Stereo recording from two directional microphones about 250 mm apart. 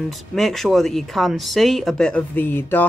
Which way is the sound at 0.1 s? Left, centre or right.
Centre.